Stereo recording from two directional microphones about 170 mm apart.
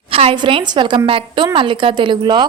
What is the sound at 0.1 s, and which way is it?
A woman's voice, 35° right (ahead or behind).